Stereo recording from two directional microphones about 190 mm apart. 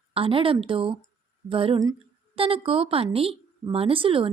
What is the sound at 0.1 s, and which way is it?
A woman's voice, 30° right (ahead or behind).